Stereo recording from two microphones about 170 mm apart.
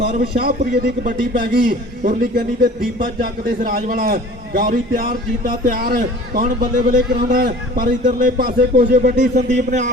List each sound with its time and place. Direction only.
0.1 s a man's voice: 65° right (ahead or behind); by 9.9 s 45° right (ahead or behind)